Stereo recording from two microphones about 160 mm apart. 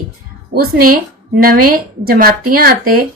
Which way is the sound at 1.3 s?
65° right (ahead or behind).